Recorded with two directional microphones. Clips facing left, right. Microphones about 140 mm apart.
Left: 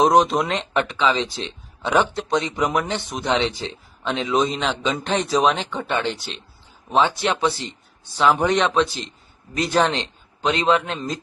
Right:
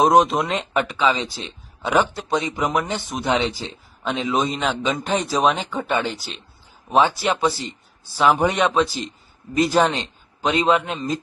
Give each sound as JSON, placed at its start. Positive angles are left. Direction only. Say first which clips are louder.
{"t": 0.0, "sound": "speech", "louder": "right 1 dB", "side_deg": 0}